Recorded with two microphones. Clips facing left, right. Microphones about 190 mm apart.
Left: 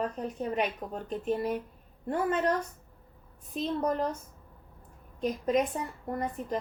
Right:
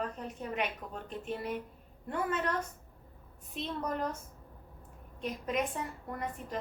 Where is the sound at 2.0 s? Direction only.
35° left (ahead or behind).